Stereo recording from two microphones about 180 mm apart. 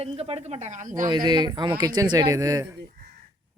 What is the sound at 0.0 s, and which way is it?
Speech, 35° right (ahead or behind).